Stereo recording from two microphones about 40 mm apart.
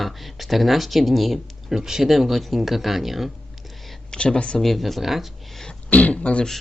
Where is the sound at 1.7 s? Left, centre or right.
Centre.